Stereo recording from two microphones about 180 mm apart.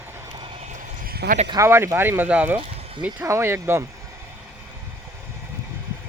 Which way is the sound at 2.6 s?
30° right (ahead or behind).